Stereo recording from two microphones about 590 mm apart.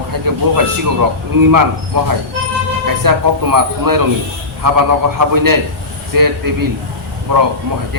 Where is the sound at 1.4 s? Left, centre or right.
Right.